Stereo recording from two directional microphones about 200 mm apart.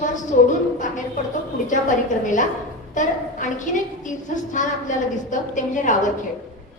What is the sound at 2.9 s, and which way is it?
A woman's voice, 40° left (ahead or behind).